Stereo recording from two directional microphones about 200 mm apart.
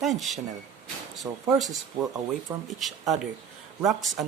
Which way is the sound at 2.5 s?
10° right (ahead or behind).